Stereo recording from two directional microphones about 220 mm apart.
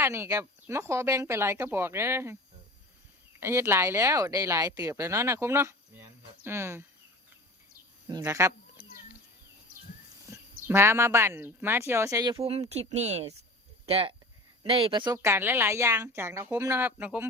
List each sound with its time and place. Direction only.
0.0 s speech: 10° right (ahead or behind)
3.4 s speech: 10° right (ahead or behind)
8.0 s speech: 15° right (ahead or behind)
10.7 s speech: 10° right (ahead or behind)